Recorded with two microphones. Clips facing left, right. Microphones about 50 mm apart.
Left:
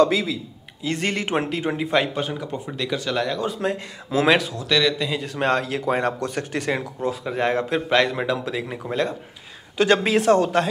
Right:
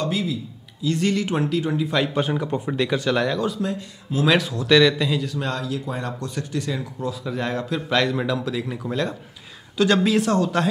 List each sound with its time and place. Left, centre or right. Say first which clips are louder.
0.8 s speech: right 2 dB; left
2.1 s a man's voice: right 4 dB; centre
3.6 s speech: left 2 dB; left
4.4 s a man's voice: right 5 dB; centre
5.2 s speech: left 3 dB; left
5.5 s speech: left 6 dB; left
7.0 s speech: left 3 dB; left